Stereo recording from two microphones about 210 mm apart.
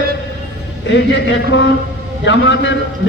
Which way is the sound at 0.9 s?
55° left (ahead or behind).